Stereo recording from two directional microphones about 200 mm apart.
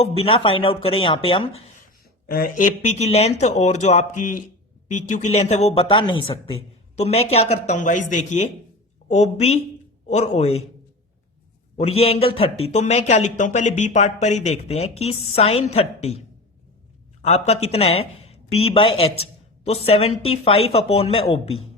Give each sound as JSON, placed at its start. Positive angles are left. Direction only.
{"t": 0.0, "sound": "speech", "side_deg": 30}
{"t": 2.2, "sound": "speech", "side_deg": 45}
{"t": 11.8, "sound": "speech", "side_deg": 30}
{"t": 17.2, "sound": "a woman's voice", "side_deg": 30}